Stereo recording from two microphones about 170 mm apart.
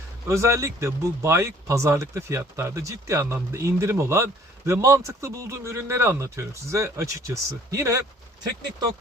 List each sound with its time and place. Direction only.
0.3 s speech: 15° right (ahead or behind)